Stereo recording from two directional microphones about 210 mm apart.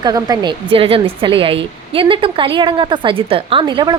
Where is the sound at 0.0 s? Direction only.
20° right (ahead or behind).